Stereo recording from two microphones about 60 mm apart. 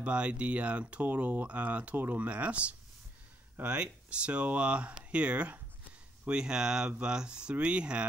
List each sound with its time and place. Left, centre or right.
0.0 s speech: centre